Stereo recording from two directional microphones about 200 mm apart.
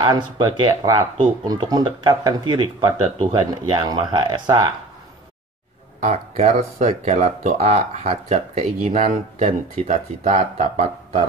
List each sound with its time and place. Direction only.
0.0 s speech: 20° right (ahead or behind)
5.9 s speech: 35° right (ahead or behind)